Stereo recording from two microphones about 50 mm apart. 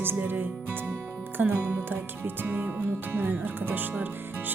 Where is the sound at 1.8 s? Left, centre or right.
Right.